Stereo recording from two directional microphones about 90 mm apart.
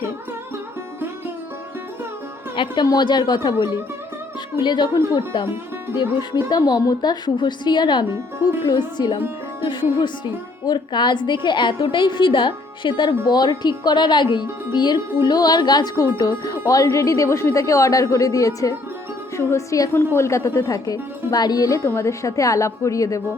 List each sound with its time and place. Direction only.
2.8 s a woman's voice: 55° left (ahead or behind)
10.7 s a woman's voice: 55° left (ahead or behind)
21.8 s speech: 30° left (ahead or behind)